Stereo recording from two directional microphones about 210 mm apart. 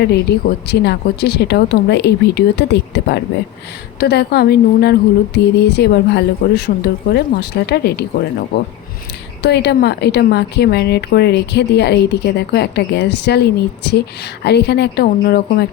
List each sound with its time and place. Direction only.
0.0 s speech: 50° left (ahead or behind)
9.4 s speech: 50° left (ahead or behind)